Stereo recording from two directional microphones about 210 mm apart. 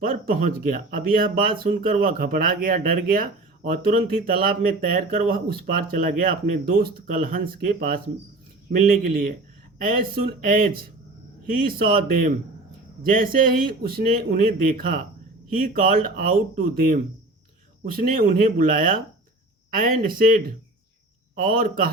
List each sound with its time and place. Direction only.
0.0 s speech: 40° right (ahead or behind)
21.4 s speech: 45° right (ahead or behind)